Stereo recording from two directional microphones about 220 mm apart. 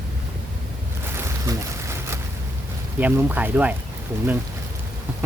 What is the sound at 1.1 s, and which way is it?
Boat, 10° right (ahead or behind).